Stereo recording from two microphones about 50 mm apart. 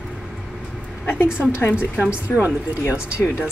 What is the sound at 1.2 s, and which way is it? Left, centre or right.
Speech, centre.